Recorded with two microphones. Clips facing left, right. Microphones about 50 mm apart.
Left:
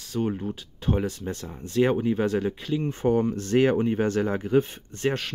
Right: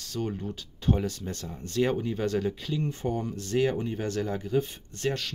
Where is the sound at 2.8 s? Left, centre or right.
Left.